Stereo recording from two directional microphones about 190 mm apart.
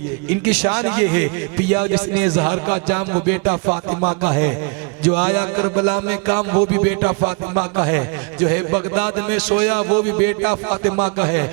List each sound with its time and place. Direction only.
0.4 s a man's voice: 10° right (ahead or behind)
1.7 s music: 20° right (ahead or behind)
8.4 s a man's voice: 20° right (ahead or behind)
10.5 s music: 25° right (ahead or behind)